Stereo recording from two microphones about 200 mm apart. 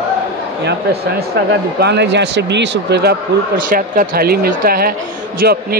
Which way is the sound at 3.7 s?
45° right (ahead or behind).